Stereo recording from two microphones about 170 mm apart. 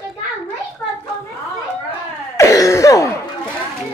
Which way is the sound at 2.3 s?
20° left (ahead or behind).